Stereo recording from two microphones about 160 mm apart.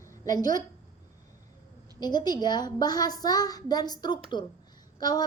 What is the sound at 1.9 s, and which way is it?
A woman's voice, 25° left (ahead or behind).